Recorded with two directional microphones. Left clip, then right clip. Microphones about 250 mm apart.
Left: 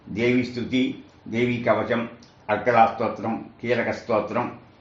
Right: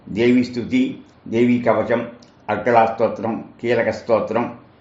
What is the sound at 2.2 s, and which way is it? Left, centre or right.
Speech, right.